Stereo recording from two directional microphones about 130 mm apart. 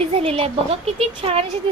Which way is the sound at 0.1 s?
50° right (ahead or behind).